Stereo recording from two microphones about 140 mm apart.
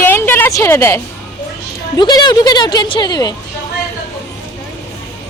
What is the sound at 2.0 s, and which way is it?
Speech, 30° left (ahead or behind).